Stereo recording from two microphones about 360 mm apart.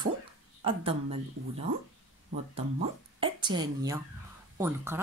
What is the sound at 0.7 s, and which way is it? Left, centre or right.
Speech, centre.